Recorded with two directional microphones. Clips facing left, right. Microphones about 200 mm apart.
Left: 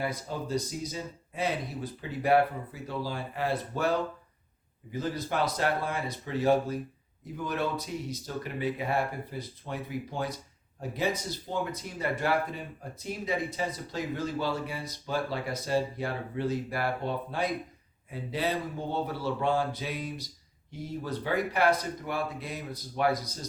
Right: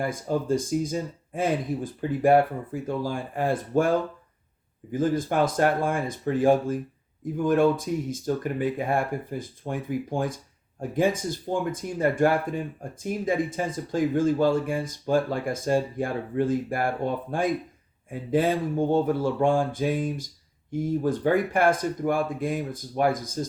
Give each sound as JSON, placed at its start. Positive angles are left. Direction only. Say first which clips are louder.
{"t": 0.0, "sound": "speech", "louder": "right 7 dB", "side_deg": -50}